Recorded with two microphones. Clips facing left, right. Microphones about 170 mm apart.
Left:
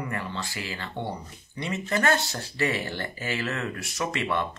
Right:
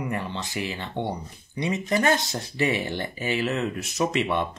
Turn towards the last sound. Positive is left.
turn(degrees=-15)  # may be behind; listen again after turning